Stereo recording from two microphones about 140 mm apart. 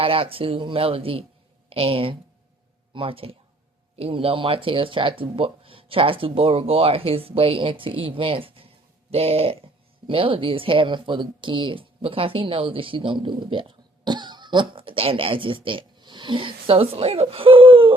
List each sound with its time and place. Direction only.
0.0 s speech: 40° right (ahead or behind)